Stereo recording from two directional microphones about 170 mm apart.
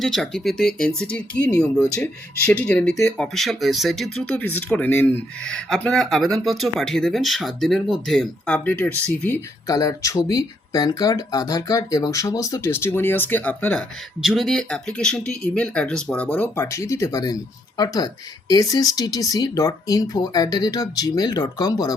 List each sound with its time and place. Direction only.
0.0 s speech: 5° left (ahead or behind); by 21.9 s 20° left (ahead or behind)